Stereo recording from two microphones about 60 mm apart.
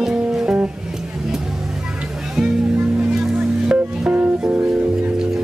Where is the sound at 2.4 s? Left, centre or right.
Centre.